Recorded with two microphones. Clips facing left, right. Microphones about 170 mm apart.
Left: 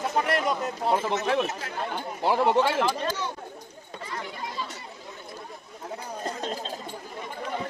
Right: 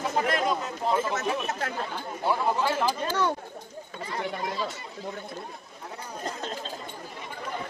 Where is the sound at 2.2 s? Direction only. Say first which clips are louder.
Left 4 dB; 80° left.